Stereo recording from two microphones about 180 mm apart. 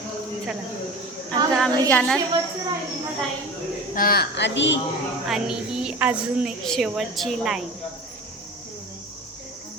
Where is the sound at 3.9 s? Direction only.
55° left (ahead or behind); by 4.8 s 85° left.